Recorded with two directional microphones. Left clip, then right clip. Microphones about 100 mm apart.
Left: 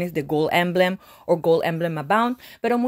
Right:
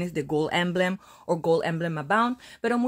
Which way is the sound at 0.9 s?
40° left (ahead or behind).